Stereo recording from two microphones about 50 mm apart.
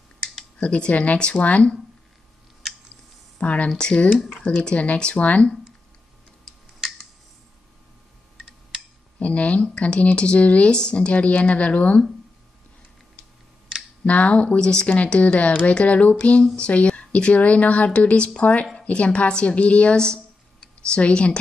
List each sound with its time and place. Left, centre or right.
0.6 s speech: left
3.3 s speech: left
6.4 s a sound: centre
9.2 s speech: left
14.0 s speech: left